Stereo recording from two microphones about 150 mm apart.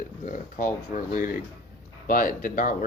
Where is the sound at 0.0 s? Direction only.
60° left (ahead or behind).